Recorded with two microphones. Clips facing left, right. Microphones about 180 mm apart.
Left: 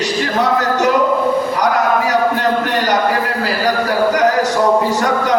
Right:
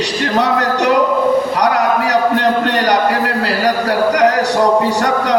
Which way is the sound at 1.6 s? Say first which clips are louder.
Right 1 dB; 70° right (ahead or behind).